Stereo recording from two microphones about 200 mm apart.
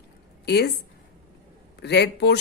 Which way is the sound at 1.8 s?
55° left (ahead or behind).